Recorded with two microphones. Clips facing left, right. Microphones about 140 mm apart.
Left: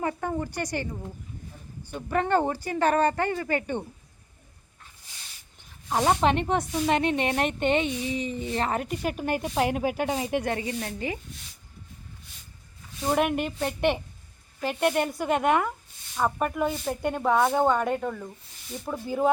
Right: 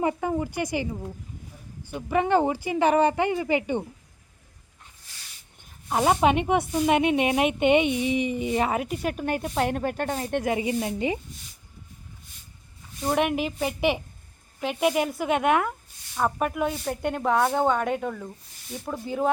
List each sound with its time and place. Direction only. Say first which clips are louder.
0.0 s speech: right 3 dB; 10° right (ahead or behind)
5.9 s speech: right 2 dB; 10° right (ahead or behind)
10.5 s speech: right 5 dB; 15° right (ahead or behind)
13.1 s speech: right 1 dB; centre (ahead or behind)